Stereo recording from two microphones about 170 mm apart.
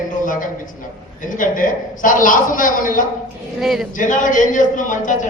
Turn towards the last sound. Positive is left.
turn(degrees=50)  # may be behind; listen again after turning